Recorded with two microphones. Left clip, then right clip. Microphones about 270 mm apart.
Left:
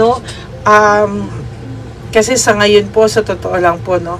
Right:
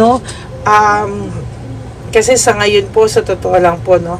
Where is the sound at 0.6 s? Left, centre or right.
Centre.